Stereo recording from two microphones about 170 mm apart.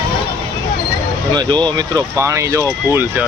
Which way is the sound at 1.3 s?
25° right (ahead or behind).